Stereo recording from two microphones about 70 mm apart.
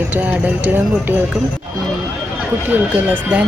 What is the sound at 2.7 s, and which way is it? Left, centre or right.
Speech, right.